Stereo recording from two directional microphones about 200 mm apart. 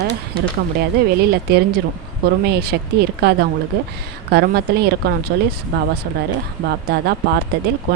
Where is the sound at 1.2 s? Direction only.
50° right (ahead or behind).